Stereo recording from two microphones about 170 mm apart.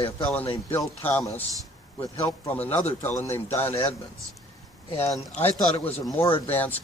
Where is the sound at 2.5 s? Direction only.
10° left (ahead or behind).